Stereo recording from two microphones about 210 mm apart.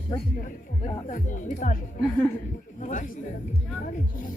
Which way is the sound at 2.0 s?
10° left (ahead or behind).